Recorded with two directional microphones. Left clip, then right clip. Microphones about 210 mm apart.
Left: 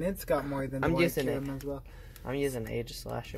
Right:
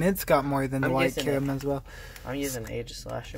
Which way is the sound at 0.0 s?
40° right (ahead or behind).